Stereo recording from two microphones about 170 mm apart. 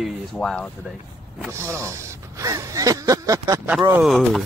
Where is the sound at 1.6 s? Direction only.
15° right (ahead or behind).